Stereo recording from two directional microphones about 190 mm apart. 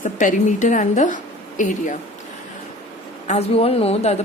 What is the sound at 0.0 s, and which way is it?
A woman's voice, 40° left (ahead or behind).